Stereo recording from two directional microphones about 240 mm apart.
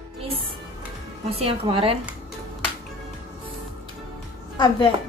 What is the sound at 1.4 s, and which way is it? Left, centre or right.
Speech, right.